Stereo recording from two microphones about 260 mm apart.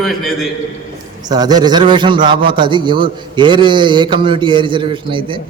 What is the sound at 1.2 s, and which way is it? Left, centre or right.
A man's voice, centre.